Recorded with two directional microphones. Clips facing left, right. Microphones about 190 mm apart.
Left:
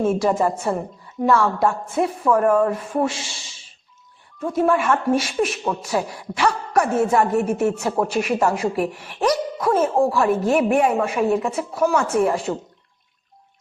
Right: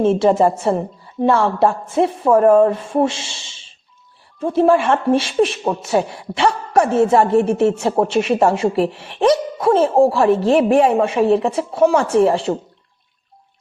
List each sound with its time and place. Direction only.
0.0 s speech: 25° right (ahead or behind)